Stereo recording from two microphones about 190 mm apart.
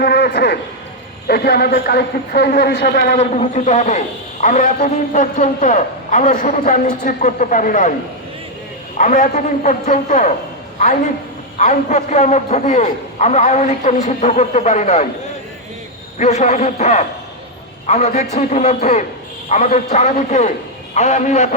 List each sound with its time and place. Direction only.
0.0 s a man's voice: 60° left (ahead or behind)
3.2 s a man's voice: 35° left (ahead or behind)
9.0 s a man's voice: 40° left (ahead or behind)
11.5 s a man's voice: 40° left (ahead or behind)
16.1 s a man's voice: 40° left (ahead or behind)